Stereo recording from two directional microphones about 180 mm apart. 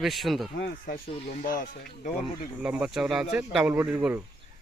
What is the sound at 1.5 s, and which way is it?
Speech, 50° left (ahead or behind).